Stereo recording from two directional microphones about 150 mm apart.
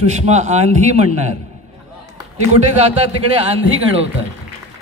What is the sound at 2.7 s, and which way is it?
Speech, 45° right (ahead or behind).